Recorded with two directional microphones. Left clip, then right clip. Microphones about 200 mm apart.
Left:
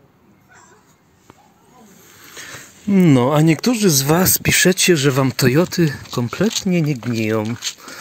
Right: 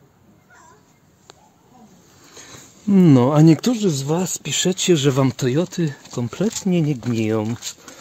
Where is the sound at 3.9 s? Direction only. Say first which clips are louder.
Left 6 dB; 15° left (ahead or behind); by 7.8 s 10° right (ahead or behind).